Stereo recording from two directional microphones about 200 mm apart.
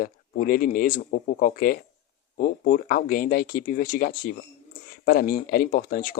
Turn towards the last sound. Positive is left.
turn(degrees=45)  # may be behind; listen again after turning